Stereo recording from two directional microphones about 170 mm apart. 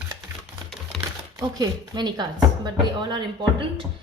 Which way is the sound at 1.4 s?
25° right (ahead or behind).